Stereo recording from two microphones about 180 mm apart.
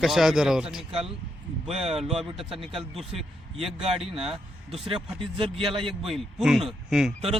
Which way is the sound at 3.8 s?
30° right (ahead or behind).